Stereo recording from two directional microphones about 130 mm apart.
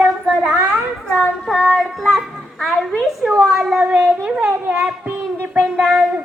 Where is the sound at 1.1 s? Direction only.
5° left (ahead or behind).